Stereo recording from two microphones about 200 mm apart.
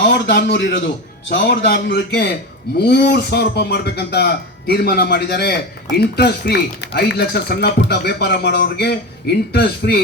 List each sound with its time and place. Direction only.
0.0 s a man's voice: 60° left (ahead or behind)